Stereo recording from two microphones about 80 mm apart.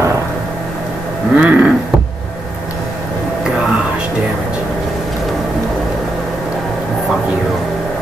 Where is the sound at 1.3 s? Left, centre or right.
Centre.